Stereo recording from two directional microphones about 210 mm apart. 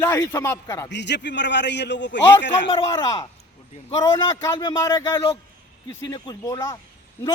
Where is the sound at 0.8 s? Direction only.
55° left (ahead or behind).